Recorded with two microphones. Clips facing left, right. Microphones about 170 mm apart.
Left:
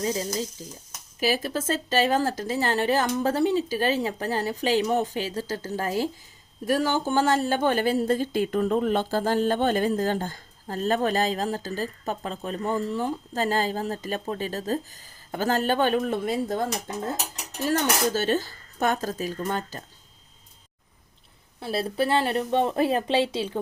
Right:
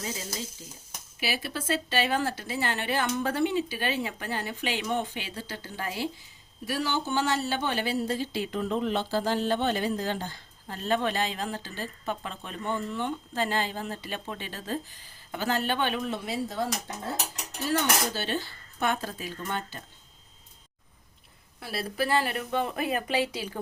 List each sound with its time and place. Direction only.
0.0 s speech: 35° left (ahead or behind)
17.7 s speech: 45° left (ahead or behind)
21.6 s speech: 25° left (ahead or behind)